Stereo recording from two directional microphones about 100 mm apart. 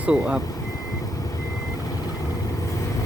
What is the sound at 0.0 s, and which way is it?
Speech, 10° right (ahead or behind).